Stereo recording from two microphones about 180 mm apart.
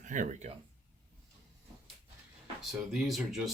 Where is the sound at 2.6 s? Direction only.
Centre (ahead or behind).